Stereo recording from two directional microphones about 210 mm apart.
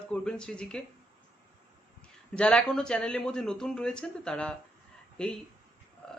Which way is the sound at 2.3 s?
5° left (ahead or behind).